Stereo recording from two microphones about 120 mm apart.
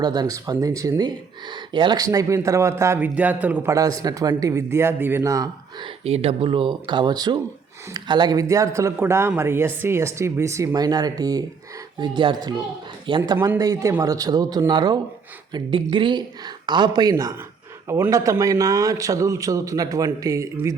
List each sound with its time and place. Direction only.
0.0 s speech: 35° right (ahead or behind)
6.1 s speech: 55° right (ahead or behind)
13.3 s speech: 25° right (ahead or behind)